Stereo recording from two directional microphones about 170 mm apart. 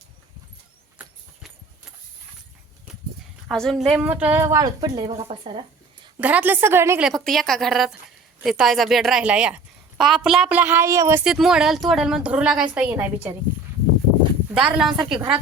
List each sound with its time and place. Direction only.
3.5 s a woman's voice: centre (ahead or behind); by 5.6 s 30° right (ahead or behind)
6.1 s a woman's voice: 10° right (ahead or behind)
7.1 s a woman's voice: centre (ahead or behind); by 11.2 s 15° right (ahead or behind)
11.2 s a woman's voice: 5° right (ahead or behind)
14.5 s a woman's voice: 5° right (ahead or behind)